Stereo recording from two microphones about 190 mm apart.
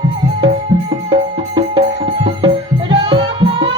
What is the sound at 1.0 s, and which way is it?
Music, 25° right (ahead or behind).